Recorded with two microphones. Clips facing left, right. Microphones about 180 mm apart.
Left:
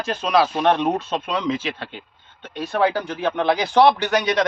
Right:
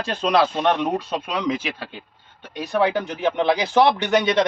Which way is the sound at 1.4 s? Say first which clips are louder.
Even; 10° right (ahead or behind).